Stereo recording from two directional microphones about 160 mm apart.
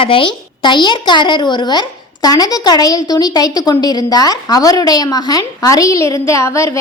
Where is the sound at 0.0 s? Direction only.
35° left (ahead or behind).